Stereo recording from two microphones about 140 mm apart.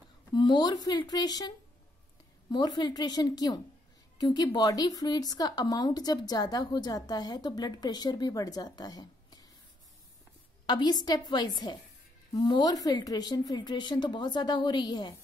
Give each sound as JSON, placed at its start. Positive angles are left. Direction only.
{"t": 0.3, "sound": "speech", "side_deg": 30}
{"t": 2.5, "sound": "speech", "side_deg": 30}
{"t": 10.7, "sound": "a woman's voice", "side_deg": 30}